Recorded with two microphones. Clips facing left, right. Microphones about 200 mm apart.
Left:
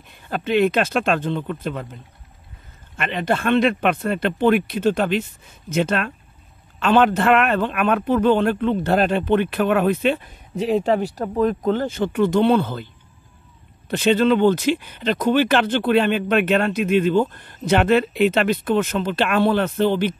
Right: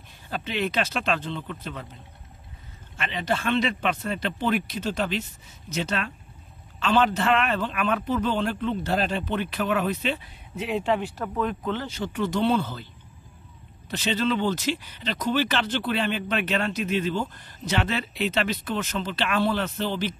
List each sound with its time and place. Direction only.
0.3 s speech: 50° left (ahead or behind)
3.0 s speech: 55° left (ahead or behind)
13.8 s speech: 55° left (ahead or behind)